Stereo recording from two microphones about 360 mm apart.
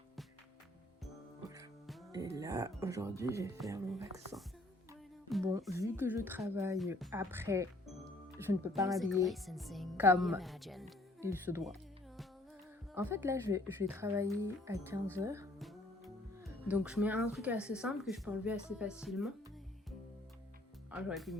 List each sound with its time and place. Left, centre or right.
1.5 s music: centre
2.1 s speech: centre
12.9 s speech: centre
15.2 s music: centre
16.4 s speech: centre
20.9 s speech: centre